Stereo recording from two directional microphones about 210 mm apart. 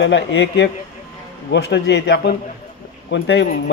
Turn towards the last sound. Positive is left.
turn(degrees=55)  # may be behind; listen again after turning